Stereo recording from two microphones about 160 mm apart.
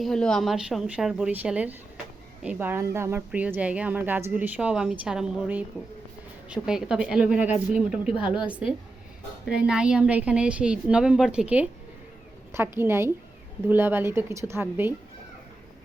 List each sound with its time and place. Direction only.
0.0 s a woman's voice: 5° left (ahead or behind); by 14.9 s 15° right (ahead or behind)